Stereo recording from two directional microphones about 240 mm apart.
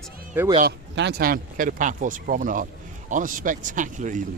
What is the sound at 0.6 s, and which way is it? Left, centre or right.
Speech, right.